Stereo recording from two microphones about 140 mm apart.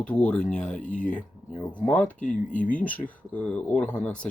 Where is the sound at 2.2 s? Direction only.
70° left (ahead or behind).